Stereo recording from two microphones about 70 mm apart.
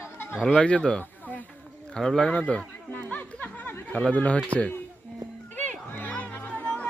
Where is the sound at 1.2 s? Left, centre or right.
Left.